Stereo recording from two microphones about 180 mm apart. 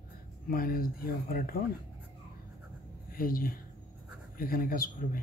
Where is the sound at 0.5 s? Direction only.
55° left (ahead or behind).